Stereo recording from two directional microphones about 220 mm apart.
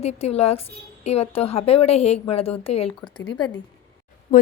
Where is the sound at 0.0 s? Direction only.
30° left (ahead or behind).